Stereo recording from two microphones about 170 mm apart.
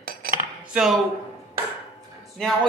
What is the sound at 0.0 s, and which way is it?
Cutlery, 60° right (ahead or behind).